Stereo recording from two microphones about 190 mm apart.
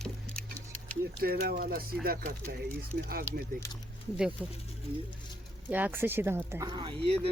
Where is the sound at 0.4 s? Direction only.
5° left (ahead or behind).